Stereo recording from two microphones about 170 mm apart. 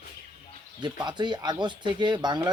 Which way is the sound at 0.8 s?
25° right (ahead or behind).